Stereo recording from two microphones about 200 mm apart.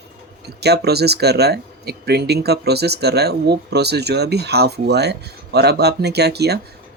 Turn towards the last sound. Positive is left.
turn(degrees=-55)  # may be behind; listen again after turning